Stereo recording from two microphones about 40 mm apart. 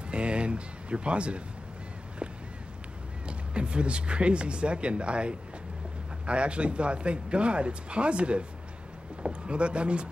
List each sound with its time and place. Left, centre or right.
0.1 s speech: right
3.3 s speech: right